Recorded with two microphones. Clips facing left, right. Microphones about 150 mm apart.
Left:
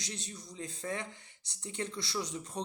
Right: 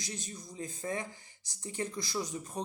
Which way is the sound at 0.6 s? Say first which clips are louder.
Right 1 dB; 10° right (ahead or behind).